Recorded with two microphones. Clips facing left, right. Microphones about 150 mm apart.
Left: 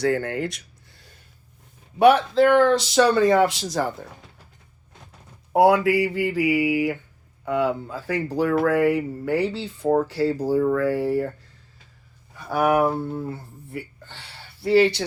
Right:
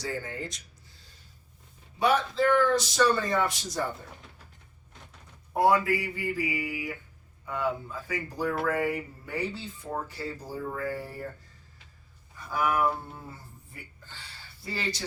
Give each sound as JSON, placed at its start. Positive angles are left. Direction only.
{"t": 0.0, "sound": "speech", "side_deg": 65}
{"t": 5.5, "sound": "mantra", "side_deg": 75}
{"t": 7.4, "sound": "speech", "side_deg": 80}
{"t": 12.3, "sound": "speech", "side_deg": 70}